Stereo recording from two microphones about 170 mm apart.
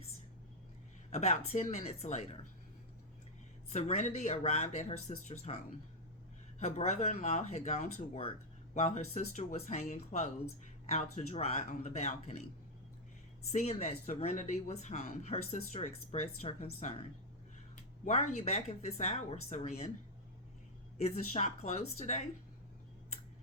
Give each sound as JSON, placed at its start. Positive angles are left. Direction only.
{"t": 1.1, "sound": "speech", "side_deg": 40}
{"t": 3.7, "sound": "speech", "side_deg": 45}
{"t": 6.6, "sound": "speech", "side_deg": 40}
{"t": 13.5, "sound": "speech", "side_deg": 40}
{"t": 21.0, "sound": "speech", "side_deg": 40}